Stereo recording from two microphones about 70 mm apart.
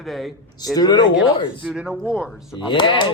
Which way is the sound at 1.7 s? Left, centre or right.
Centre.